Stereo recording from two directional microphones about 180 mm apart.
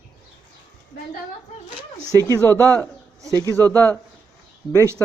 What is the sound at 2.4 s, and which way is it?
Speech, 10° left (ahead or behind).